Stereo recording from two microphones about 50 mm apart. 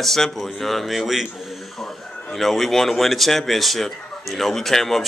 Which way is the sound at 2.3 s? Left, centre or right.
Centre.